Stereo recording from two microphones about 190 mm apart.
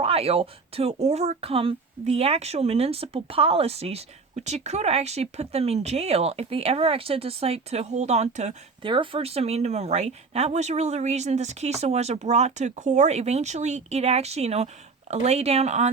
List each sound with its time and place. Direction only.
0.0 s speech: 30° right (ahead or behind)